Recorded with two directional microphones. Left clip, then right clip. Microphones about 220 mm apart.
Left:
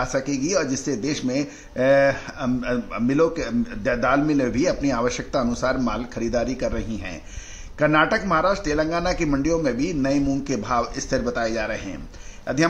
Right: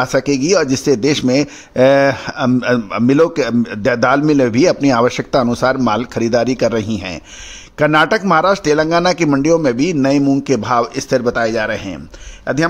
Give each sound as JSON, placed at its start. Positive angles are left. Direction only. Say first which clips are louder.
{"t": 0.0, "sound": "a man's voice", "louder": "right 9 dB", "side_deg": -45}